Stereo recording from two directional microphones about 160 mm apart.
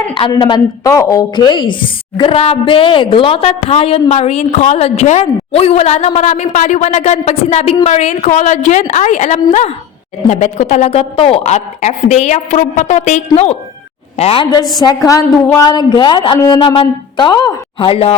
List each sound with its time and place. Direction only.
0.3 s a woman's voice: 30° left (ahead or behind)
14.8 s a woman's voice: 25° left (ahead or behind)